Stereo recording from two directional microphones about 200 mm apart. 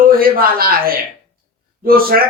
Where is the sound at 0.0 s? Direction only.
45° right (ahead or behind).